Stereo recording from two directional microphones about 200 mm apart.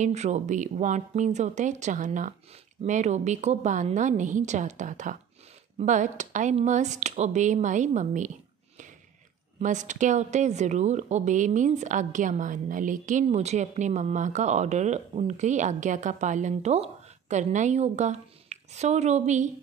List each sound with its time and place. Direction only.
0.0 s a woman's voice: 35° right (ahead or behind)
9.6 s a woman's voice: 40° right (ahead or behind)